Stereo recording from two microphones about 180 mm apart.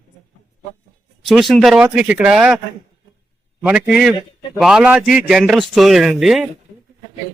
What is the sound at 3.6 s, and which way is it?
A man's voice, 5° right (ahead or behind).